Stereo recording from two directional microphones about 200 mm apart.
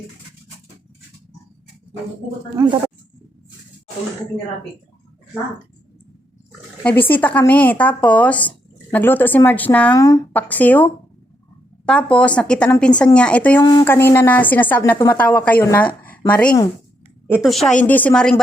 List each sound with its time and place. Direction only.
2.6 s speech: 20° right (ahead or behind)
7.1 s a woman's voice: 10° left (ahead or behind)
13.6 s a woman's voice: 20° left (ahead or behind); by 18.3 s 5° left (ahead or behind)